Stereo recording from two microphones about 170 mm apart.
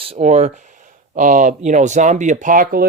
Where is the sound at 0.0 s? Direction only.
40° right (ahead or behind).